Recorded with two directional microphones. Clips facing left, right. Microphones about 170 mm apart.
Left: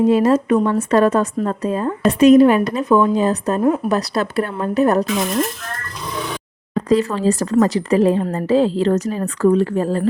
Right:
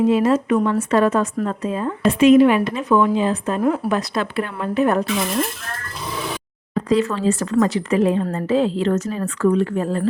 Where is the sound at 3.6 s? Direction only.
20° left (ahead or behind).